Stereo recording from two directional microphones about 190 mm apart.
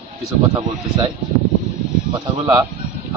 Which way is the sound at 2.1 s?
20° right (ahead or behind).